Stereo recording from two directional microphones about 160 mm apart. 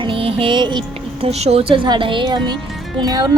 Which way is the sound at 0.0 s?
35° right (ahead or behind).